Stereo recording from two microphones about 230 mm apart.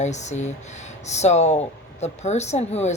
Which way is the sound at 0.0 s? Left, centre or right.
Left.